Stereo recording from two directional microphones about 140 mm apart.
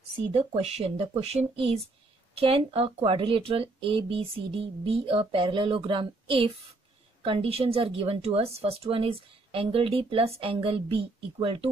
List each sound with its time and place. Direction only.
0.3 s a woman's voice: 45° right (ahead or behind)